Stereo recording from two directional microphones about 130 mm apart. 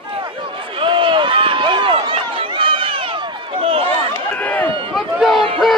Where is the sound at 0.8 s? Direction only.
40° right (ahead or behind).